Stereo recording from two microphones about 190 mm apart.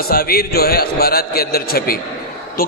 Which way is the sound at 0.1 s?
55° left (ahead or behind).